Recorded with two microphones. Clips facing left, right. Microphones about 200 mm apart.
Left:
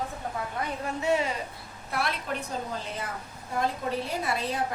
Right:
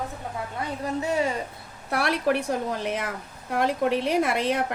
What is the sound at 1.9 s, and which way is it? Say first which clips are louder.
A woman's voice: right 8 dB; 70° right (ahead or behind).